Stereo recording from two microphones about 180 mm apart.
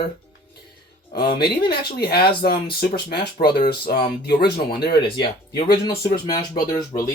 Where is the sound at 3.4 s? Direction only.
50° left (ahead or behind).